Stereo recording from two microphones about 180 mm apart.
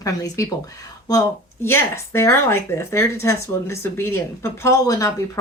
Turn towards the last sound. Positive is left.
turn(degrees=20)  # may be behind; listen again after turning